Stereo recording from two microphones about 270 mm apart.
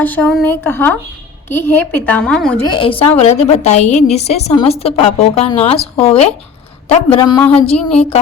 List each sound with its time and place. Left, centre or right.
0.0 s a woman's voice: centre
2.6 s a woman's voice: centre